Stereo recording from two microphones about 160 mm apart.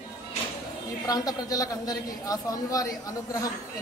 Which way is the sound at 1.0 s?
25° left (ahead or behind).